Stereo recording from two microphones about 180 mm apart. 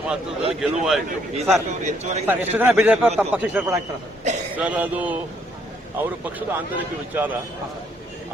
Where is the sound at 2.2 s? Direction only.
10° right (ahead or behind).